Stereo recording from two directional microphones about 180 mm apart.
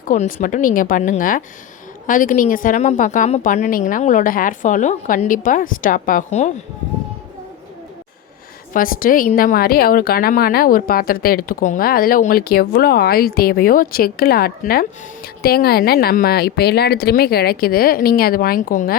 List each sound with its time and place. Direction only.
0.1 s a woman's voice: 45° left (ahead or behind)
8.7 s a woman's voice: 50° left (ahead or behind)